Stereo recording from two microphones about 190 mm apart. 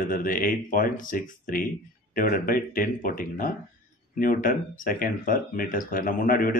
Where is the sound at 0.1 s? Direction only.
45° left (ahead or behind).